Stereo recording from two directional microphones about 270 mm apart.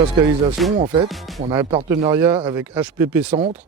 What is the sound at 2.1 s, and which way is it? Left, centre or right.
A man's voice, centre.